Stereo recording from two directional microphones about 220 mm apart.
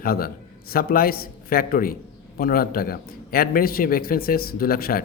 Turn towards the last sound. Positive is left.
turn(degrees=40)  # may be behind; listen again after turning